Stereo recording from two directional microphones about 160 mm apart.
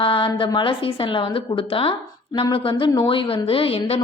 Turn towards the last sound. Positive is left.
turn(degrees=35)  # may be behind; listen again after turning